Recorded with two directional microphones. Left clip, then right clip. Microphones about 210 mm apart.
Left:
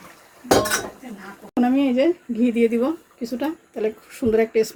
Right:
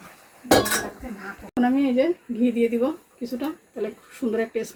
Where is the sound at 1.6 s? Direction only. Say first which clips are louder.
Left 2 dB; 35° left (ahead or behind).